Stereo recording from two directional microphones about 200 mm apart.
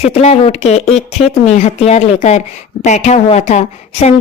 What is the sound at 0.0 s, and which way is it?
A woman's voice, 35° left (ahead or behind).